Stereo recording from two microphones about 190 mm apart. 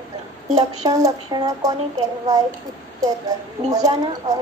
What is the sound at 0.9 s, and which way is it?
Speech, 20° right (ahead or behind).